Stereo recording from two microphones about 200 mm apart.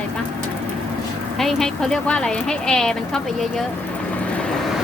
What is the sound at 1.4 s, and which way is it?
Speech, centre (ahead or behind).